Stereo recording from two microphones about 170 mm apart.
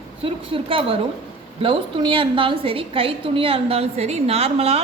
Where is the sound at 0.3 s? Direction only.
30° right (ahead or behind).